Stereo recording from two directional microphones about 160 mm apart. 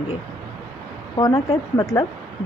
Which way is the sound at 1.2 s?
25° left (ahead or behind).